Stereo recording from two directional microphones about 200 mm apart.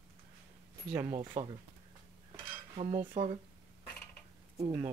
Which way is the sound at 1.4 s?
40° right (ahead or behind).